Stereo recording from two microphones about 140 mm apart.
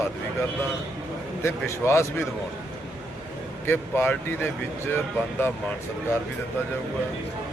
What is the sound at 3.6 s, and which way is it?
Speech, 15° left (ahead or behind).